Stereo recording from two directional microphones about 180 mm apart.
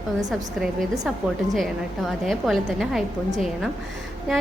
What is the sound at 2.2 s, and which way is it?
Speech, centre (ahead or behind).